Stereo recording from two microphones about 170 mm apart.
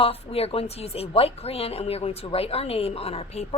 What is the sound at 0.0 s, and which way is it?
A woman's voice, 35° left (ahead or behind).